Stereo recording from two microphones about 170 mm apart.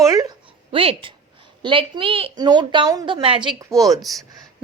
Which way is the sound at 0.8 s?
35° right (ahead or behind).